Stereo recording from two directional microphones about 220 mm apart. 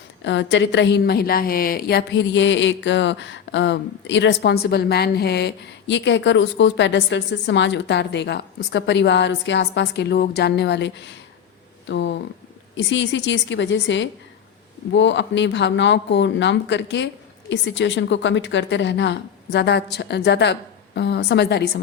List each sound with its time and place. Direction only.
0.3 s a woman's voice: 55° left (ahead or behind)